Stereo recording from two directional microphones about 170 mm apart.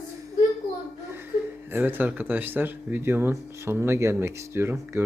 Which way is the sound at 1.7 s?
10° right (ahead or behind).